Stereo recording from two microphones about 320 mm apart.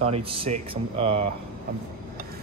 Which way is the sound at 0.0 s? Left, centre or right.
Centre.